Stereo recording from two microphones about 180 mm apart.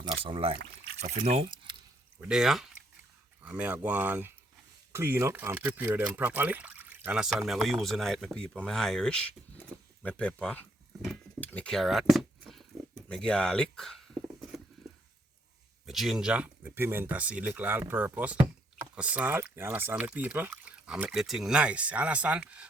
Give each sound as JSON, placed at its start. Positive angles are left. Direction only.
{"t": 0.1, "sound": "speech", "side_deg": -30}
{"t": 1.0, "sound": "speech", "side_deg": -40}
{"t": 2.2, "sound": "speech", "side_deg": -5}
{"t": 13.1, "sound": "dog", "side_deg": 5}
{"t": 15.9, "sound": "speech", "side_deg": 0}